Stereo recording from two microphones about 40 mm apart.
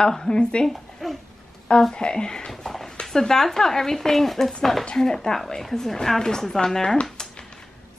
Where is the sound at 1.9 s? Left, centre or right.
Centre.